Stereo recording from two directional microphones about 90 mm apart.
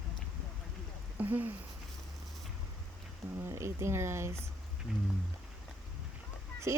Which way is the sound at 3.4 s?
30° right (ahead or behind).